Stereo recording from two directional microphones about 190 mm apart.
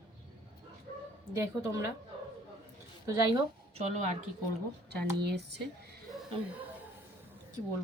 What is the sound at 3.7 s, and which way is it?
Speech, 35° right (ahead or behind).